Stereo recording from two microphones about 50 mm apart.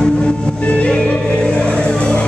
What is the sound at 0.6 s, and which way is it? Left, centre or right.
Music, left.